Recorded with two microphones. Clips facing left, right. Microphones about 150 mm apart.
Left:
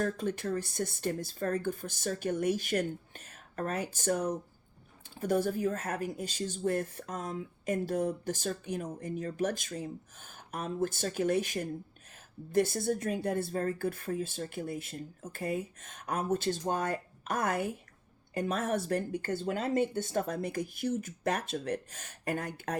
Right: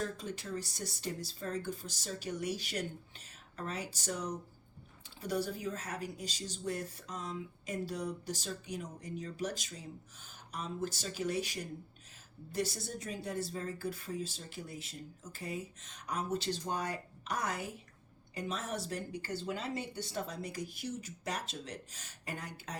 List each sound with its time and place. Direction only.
0.0 s speech: 55° left (ahead or behind)